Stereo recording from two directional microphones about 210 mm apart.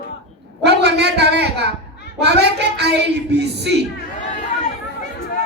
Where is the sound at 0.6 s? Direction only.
50° right (ahead or behind).